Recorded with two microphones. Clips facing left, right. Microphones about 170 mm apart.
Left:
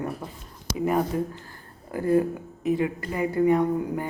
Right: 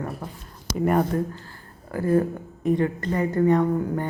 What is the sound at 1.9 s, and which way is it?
Speech, 20° left (ahead or behind).